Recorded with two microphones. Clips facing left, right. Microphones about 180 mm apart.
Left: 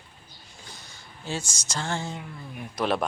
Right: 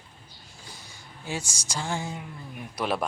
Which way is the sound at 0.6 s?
10° right (ahead or behind).